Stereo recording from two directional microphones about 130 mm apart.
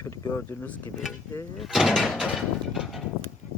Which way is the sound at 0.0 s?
20° left (ahead or behind).